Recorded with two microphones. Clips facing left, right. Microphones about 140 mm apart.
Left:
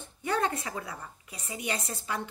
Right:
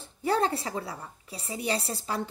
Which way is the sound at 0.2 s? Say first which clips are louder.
Right 3 dB; 35° right (ahead or behind).